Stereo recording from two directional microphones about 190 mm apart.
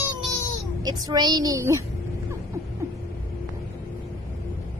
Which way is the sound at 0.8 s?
20° right (ahead or behind).